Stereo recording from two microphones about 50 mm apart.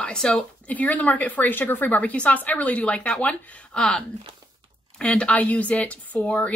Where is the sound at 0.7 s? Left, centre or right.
Left.